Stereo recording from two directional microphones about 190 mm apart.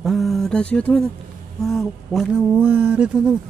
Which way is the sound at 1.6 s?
Centre (ahead or behind).